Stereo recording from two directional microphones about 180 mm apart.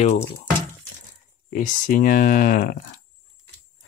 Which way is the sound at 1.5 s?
45° left (ahead or behind).